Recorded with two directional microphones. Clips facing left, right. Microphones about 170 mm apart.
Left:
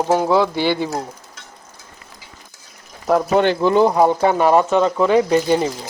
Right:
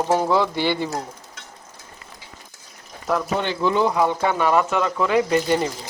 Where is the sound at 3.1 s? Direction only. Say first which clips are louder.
Left 7 dB; 50° left (ahead or behind).